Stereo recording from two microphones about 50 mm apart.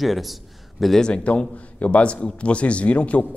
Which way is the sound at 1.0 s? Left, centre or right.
Centre.